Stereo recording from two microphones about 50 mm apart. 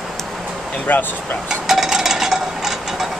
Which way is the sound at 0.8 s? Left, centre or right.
Left.